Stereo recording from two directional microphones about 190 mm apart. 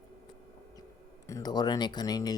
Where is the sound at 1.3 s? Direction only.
20° left (ahead or behind).